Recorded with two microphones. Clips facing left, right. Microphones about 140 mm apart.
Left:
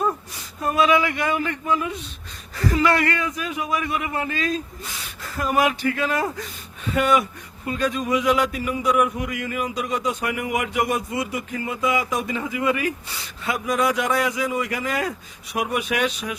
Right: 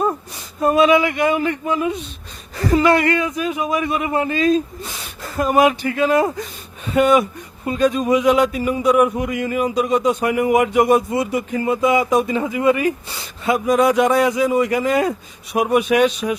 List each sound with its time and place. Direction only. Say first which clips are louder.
0.6 s speech: right 5 dB; 25° right (ahead or behind)